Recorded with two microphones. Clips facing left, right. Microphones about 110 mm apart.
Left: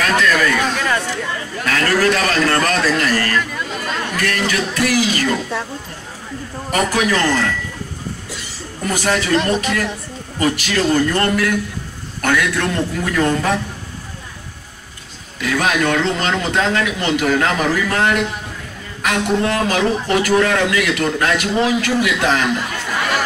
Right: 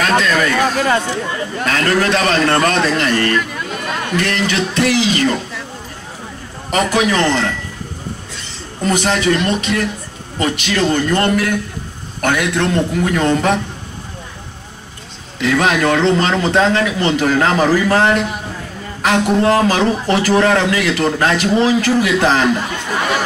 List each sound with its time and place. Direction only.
0.0 s a man's voice: 25° right (ahead or behind)
3.3 s a sound: 5° right (ahead or behind)
4.5 s a man's voice: 25° right (ahead or behind)
6.7 s a man's voice: 20° right (ahead or behind)
8.8 s a man's voice: 20° right (ahead or behind)
15.3 s a man's voice: 25° right (ahead or behind)